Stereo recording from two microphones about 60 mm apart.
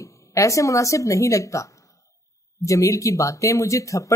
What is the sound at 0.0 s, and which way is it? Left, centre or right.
Speech, left.